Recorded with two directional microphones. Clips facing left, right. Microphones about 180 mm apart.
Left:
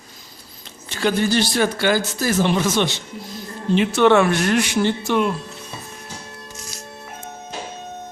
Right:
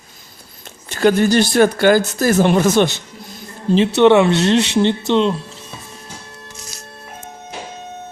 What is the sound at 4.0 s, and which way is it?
A woman's voice, 20° right (ahead or behind).